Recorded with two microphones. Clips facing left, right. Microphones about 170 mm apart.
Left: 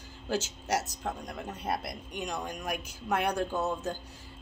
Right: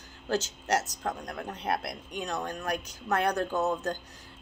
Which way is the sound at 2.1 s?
10° left (ahead or behind).